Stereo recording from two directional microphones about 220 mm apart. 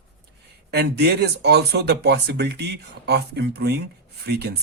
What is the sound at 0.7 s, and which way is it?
Speech, 45° right (ahead or behind).